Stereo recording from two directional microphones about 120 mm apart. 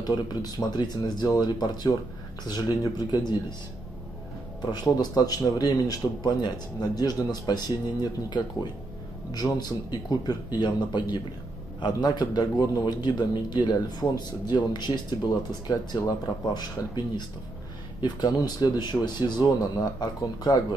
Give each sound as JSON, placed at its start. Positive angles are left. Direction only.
{"t": 0.0, "sound": "a man's voice", "side_deg": 35}
{"t": 4.6, "sound": "a man's voice", "side_deg": 35}
{"t": 18.0, "sound": "a man's voice", "side_deg": 35}